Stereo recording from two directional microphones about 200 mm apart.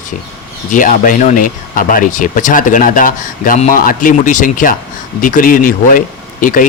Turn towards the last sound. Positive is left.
turn(degrees=40)  # may be behind; listen again after turning